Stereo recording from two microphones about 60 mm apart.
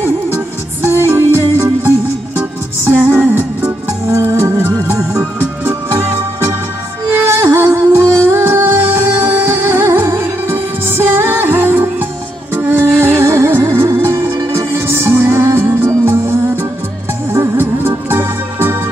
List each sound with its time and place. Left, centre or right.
0.8 s music: right
4.1 s music: right
17.3 s music: right